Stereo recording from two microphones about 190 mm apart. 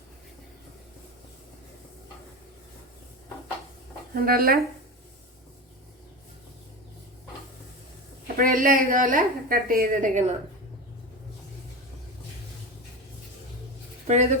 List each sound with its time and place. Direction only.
4.1 s a woman's voice: 50° right (ahead or behind)
8.4 s a woman's voice: 45° right (ahead or behind)
14.1 s speech: 35° right (ahead or behind)